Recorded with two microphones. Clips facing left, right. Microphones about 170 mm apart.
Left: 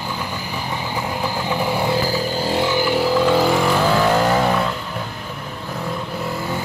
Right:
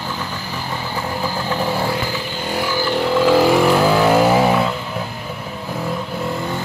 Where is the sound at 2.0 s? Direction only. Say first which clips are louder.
Left 4 dB; 35° left (ahead or behind).